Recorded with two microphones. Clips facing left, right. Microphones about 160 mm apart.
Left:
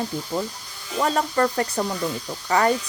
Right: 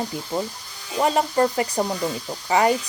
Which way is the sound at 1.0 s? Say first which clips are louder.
Right 2 dB; 15° right (ahead or behind).